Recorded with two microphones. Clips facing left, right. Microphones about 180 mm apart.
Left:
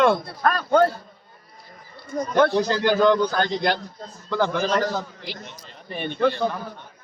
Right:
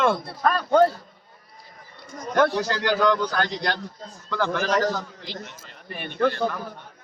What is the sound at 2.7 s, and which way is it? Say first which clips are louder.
A man's voice: left 3 dB; 20° left (ahead or behind).